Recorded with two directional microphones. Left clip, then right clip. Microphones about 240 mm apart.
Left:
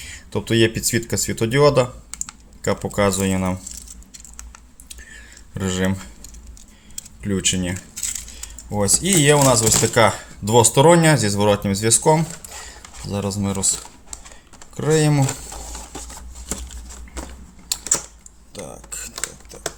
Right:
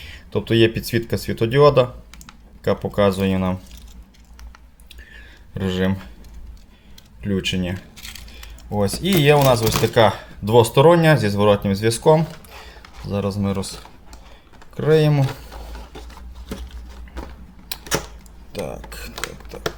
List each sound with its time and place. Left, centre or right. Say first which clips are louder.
0.0 s speech: right 2 dB; centre
4.9 s a sound: left 2 dB; centre
7.2 s speech: left 1 dB; centre
14.8 s speech: right 2 dB; centre
18.5 s typing: right 5 dB; centre